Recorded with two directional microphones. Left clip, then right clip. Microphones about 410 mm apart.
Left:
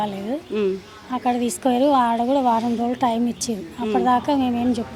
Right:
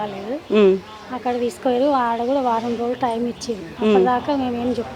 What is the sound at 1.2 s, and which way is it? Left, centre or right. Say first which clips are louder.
Speech: right 1 dB; left.